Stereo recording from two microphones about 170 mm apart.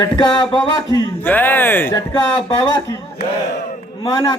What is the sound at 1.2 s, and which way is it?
Speech, 10° left (ahead or behind).